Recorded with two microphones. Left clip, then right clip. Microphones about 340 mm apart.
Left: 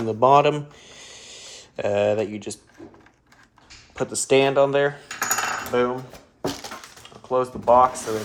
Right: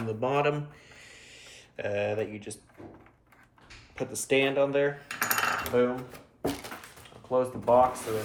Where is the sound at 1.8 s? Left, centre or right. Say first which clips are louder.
Left 9 dB; left.